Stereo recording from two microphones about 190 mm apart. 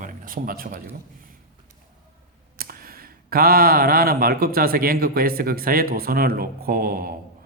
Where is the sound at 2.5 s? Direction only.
50° right (ahead or behind).